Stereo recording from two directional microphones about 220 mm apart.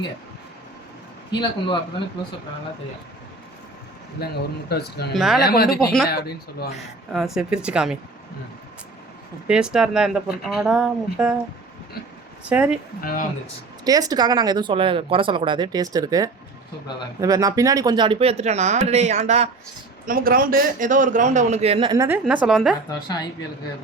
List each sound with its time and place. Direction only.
1.4 s speech: 20° left (ahead or behind)
4.2 s a man's voice: 45° left (ahead or behind)
5.1 s speech: centre (ahead or behind)
5.4 s a man's voice: 45° left (ahead or behind)
7.1 s speech: centre (ahead or behind)
9.5 s speech: 5° right (ahead or behind)
12.5 s speech: 5° right (ahead or behind)
13.0 s speech: 40° left (ahead or behind)
13.8 s a man's voice: 15° right (ahead or behind)
23.0 s speech: 20° left (ahead or behind)